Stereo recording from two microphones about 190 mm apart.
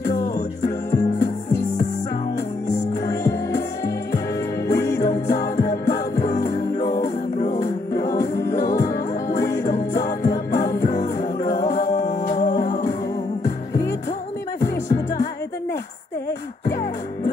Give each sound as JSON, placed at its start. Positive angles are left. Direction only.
{"t": 0.7, "sound": "music", "side_deg": 15}
{"t": 3.1, "sound": "music", "side_deg": 15}
{"t": 12.1, "sound": "music", "side_deg": 45}
{"t": 13.4, "sound": "music", "side_deg": 15}